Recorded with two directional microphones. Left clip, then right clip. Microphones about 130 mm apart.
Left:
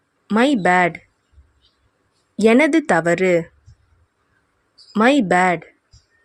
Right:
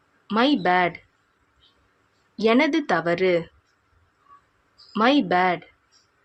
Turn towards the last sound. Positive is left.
turn(degrees=75)  # may be behind; listen again after turning